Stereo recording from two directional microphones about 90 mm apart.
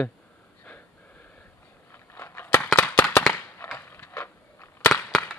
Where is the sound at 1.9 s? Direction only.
25° left (ahead or behind).